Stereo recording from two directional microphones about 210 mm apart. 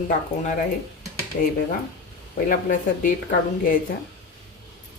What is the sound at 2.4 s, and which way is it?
Speech, 40° left (ahead or behind).